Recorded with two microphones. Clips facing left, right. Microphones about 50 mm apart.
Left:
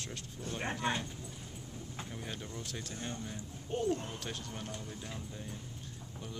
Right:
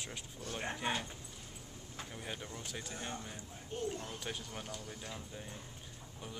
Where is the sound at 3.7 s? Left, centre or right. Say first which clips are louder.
Left 5 dB; left.